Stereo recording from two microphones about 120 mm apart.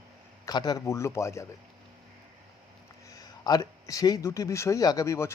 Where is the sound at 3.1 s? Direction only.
30° left (ahead or behind).